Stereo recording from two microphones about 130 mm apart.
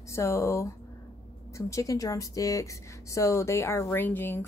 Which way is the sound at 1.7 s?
25° left (ahead or behind).